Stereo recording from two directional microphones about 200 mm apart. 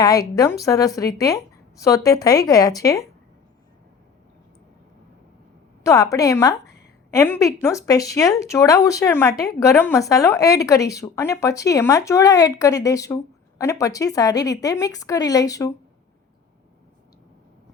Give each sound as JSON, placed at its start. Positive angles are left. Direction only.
{"t": 0.0, "sound": "a woman's voice", "side_deg": 20}
{"t": 5.8, "sound": "a woman's voice", "side_deg": 15}
{"t": 6.5, "sound": "a sound", "side_deg": 55}
{"t": 7.1, "sound": "a woman's voice", "side_deg": 15}